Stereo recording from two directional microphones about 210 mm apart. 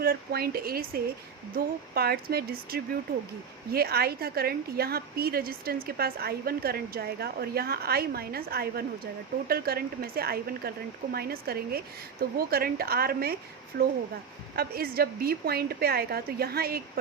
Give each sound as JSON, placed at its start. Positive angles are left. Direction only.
{"t": 0.0, "sound": "a woman's voice", "side_deg": -45}